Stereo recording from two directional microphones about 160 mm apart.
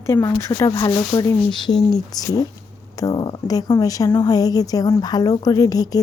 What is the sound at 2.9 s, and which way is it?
A woman's voice, 25° left (ahead or behind).